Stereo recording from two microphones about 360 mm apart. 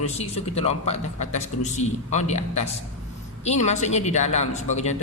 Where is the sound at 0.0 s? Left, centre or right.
Centre.